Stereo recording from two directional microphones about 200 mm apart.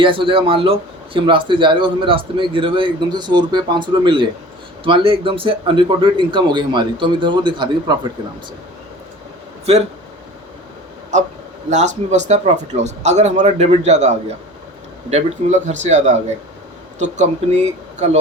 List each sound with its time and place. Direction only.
0.0 s speech: 25° right (ahead or behind)
11.1 s speech: 35° right (ahead or behind)